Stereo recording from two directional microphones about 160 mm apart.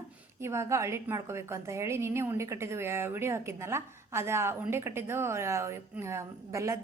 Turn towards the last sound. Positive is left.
turn(degrees=-20)  # may be behind; listen again after turning